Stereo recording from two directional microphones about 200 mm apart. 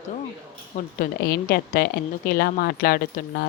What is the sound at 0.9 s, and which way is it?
A woman's voice, 50° left (ahead or behind).